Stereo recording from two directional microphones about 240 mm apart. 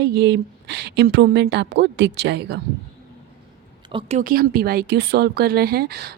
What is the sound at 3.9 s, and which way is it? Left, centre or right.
A woman's voice, right.